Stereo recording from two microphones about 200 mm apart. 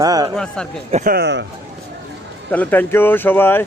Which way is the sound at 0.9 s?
45° right (ahead or behind).